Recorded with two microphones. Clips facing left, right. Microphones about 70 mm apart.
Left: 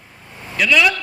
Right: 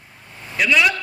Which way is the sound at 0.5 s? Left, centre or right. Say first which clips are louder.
Left 2 dB; right.